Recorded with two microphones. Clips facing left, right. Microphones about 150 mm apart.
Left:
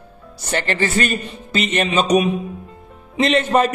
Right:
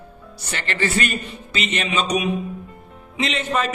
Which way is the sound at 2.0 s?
40° left (ahead or behind).